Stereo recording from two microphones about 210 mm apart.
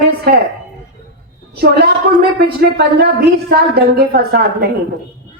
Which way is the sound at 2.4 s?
50° right (ahead or behind).